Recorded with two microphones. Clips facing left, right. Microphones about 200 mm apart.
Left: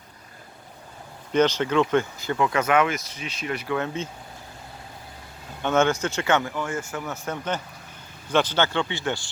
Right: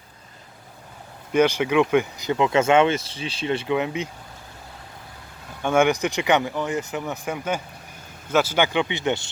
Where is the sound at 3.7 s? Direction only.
15° right (ahead or behind).